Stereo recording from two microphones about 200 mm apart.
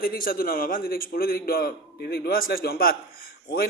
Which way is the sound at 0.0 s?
45° left (ahead or behind).